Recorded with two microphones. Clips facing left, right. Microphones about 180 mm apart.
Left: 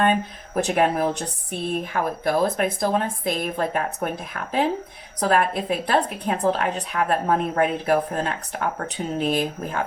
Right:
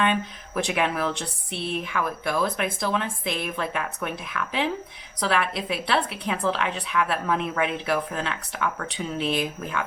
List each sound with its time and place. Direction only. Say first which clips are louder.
0.0 s speech: left 3 dB; 40° left (ahead or behind)